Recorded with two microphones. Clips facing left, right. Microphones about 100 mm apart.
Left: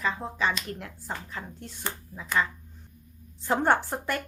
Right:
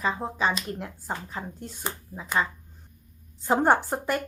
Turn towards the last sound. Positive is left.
turn(degrees=-10)  # may be behind; listen again after turning